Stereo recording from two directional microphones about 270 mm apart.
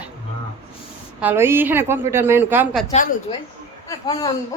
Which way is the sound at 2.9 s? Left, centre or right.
Left.